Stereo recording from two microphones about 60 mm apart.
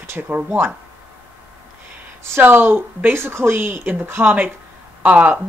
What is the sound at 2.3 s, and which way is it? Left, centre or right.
Speech, right.